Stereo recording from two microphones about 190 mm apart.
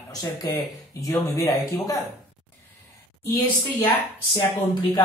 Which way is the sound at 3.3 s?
10° left (ahead or behind).